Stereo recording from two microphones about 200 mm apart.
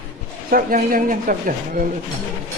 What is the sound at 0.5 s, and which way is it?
Speech, 45° right (ahead or behind).